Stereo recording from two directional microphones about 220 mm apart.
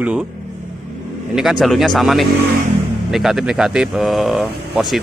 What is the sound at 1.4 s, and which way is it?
Speech, centre (ahead or behind).